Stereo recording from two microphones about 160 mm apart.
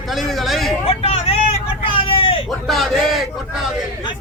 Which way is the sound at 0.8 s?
35° left (ahead or behind).